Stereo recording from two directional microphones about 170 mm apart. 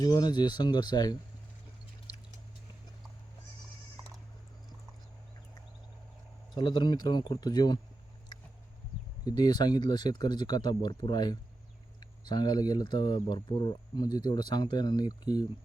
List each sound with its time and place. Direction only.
0.0 s speech: 25° left (ahead or behind)
6.6 s speech: 25° left (ahead or behind)
9.2 s speech: 25° left (ahead or behind)